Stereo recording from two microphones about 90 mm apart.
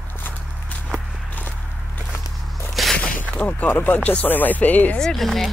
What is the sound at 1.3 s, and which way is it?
Walk, 20° left (ahead or behind).